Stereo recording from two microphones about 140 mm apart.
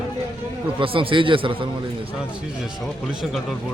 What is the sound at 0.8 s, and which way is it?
Speech, 40° right (ahead or behind).